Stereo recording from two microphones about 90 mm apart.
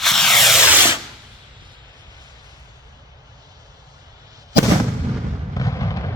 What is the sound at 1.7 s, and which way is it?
Vehicle, 55° right (ahead or behind).